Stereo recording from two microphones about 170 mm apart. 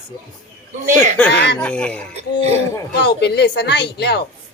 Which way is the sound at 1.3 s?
80° left.